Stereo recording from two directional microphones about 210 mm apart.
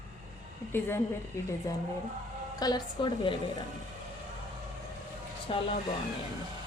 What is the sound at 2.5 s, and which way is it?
Speech, 20° left (ahead or behind).